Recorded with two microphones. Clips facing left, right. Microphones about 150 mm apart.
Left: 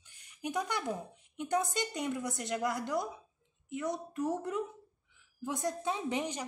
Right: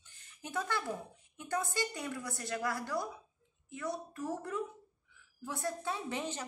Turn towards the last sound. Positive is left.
turn(degrees=15)  # may be behind; listen again after turning